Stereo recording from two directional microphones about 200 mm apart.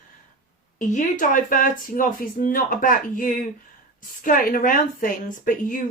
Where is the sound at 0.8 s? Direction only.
40° left (ahead or behind).